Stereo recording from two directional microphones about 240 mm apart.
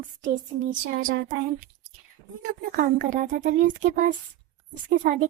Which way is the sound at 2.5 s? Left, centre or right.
Right.